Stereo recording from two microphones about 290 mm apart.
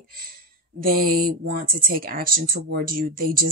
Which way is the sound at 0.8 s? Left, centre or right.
Right.